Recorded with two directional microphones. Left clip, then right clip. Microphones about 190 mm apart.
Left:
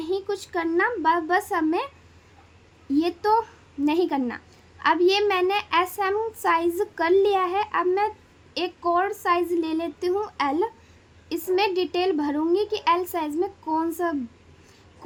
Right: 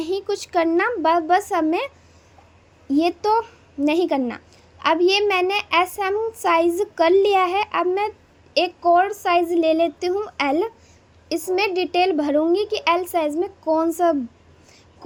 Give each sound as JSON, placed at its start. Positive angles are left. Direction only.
{"t": 0.0, "sound": "speech", "side_deg": -25}
{"t": 2.9, "sound": "speech", "side_deg": -15}